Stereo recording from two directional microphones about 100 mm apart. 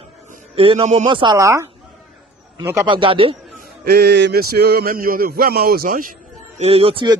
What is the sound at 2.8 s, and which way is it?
Speech, 55° right (ahead or behind).